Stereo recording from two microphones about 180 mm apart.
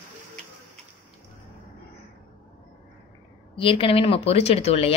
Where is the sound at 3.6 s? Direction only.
30° left (ahead or behind).